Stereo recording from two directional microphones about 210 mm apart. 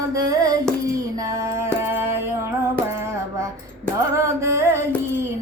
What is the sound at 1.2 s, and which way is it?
Music, 15° right (ahead or behind).